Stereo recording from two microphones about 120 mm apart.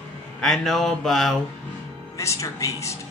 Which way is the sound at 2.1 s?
25° left (ahead or behind).